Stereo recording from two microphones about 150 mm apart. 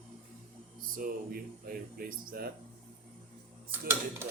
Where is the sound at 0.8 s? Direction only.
70° right (ahead or behind).